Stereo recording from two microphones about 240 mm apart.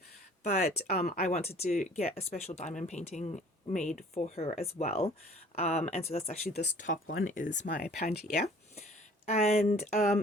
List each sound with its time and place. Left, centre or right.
0.9 s speech: left
1.2 s speech: left
9.2 s speech: left